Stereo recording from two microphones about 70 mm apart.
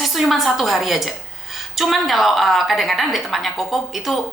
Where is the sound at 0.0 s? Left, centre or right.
Centre.